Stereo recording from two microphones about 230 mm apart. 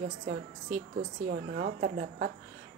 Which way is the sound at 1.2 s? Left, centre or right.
Right.